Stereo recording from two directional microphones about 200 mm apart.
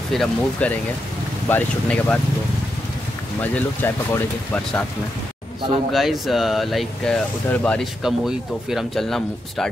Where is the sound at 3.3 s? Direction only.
10° left (ahead or behind).